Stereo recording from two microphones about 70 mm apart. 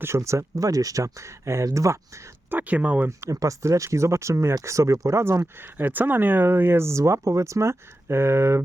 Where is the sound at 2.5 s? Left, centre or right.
Right.